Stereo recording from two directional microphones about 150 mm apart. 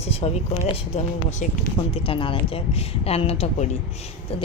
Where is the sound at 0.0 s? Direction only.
40° left (ahead or behind).